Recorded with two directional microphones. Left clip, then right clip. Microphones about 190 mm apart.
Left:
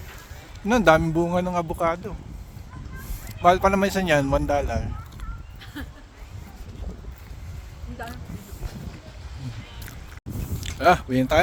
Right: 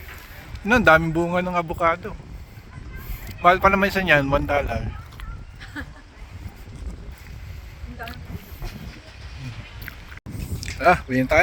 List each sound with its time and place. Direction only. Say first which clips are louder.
0.7 s speech: right 2 dB; centre (ahead or behind)
3.2 s speech: right 2 dB; 5° left (ahead or behind)
5.7 s a sound: right 3 dB; 30° right (ahead or behind)
10.8 s speech: right 1 dB; 5° left (ahead or behind)